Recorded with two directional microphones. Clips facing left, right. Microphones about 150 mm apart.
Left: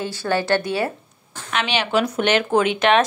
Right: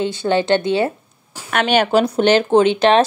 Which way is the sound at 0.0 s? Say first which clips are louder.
Right 5 dB; 20° right (ahead or behind).